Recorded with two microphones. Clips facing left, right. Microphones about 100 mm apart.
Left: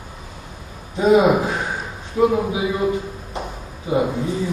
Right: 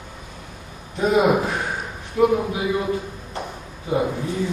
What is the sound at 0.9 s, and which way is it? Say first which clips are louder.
Speech: left 3 dB; 20° left (ahead or behind).